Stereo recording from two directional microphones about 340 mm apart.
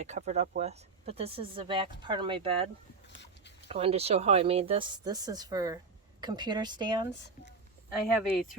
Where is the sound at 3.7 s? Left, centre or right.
Centre.